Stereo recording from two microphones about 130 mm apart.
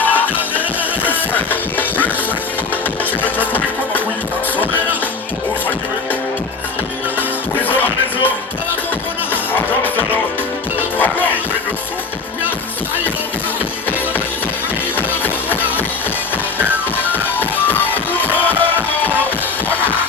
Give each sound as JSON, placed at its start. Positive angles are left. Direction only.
{"t": 0.0, "sound": "music", "side_deg": 15}
{"t": 3.2, "sound": "music", "side_deg": 15}
{"t": 7.5, "sound": "music", "side_deg": 15}
{"t": 9.3, "sound": "music", "side_deg": 15}
{"t": 14.9, "sound": "music", "side_deg": 15}
{"t": 16.6, "sound": "music", "side_deg": -15}
{"t": 17.2, "sound": "music", "side_deg": 15}